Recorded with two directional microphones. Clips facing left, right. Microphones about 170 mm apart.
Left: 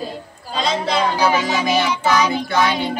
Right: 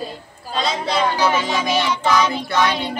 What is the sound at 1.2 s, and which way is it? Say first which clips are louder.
Child singing: left 1 dB; 10° left (ahead or behind).